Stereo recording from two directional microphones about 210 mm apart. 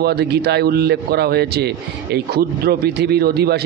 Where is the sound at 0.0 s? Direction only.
50° right (ahead or behind).